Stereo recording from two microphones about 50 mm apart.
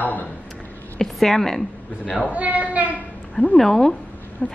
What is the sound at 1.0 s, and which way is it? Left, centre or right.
Speech, centre.